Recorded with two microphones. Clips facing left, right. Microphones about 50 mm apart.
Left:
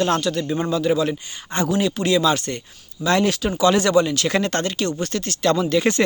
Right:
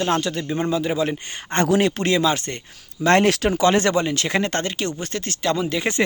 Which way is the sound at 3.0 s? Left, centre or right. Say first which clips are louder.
Right 3 dB; right.